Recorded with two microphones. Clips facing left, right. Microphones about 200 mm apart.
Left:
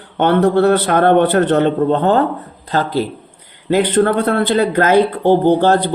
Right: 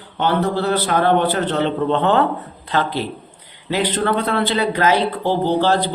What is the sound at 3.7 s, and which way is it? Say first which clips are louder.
Speech: left 6 dB; 50° left (ahead or behind).